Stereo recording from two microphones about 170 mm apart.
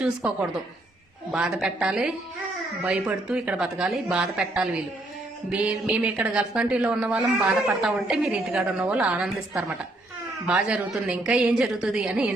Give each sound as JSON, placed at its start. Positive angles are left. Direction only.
{"t": 0.0, "sound": "a woman's voice", "side_deg": -5}